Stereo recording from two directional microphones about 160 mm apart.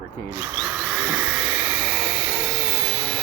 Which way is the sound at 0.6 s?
5° right (ahead or behind).